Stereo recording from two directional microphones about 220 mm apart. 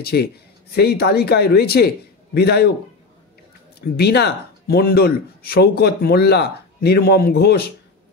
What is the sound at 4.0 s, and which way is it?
Speech, 50° left (ahead or behind).